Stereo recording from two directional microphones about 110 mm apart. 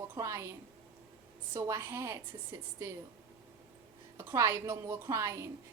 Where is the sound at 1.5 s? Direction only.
25° right (ahead or behind).